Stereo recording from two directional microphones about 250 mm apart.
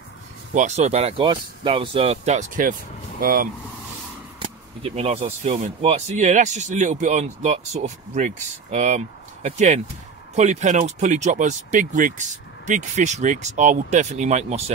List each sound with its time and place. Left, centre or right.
0.6 s speech: right
4.4 s speech: right